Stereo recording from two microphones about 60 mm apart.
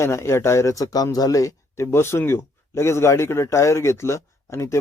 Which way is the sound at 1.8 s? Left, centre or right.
Left.